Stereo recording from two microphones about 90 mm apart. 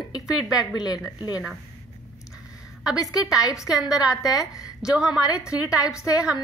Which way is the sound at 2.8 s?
10° right (ahead or behind).